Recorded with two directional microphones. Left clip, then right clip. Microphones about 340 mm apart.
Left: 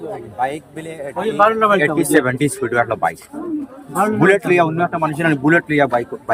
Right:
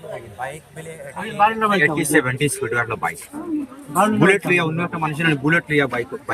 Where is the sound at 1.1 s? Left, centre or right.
Centre.